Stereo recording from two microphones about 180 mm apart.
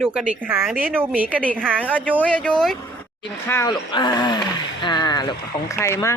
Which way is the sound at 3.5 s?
20° left (ahead or behind).